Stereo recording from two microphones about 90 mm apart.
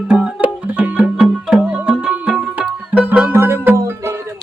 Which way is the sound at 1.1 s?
5° right (ahead or behind).